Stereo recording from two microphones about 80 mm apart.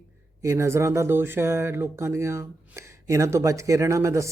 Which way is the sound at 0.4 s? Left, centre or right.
Right.